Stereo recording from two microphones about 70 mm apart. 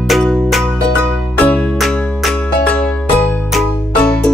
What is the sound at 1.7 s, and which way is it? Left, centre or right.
Music, centre.